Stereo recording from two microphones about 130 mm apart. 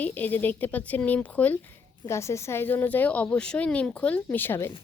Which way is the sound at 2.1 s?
20° left (ahead or behind).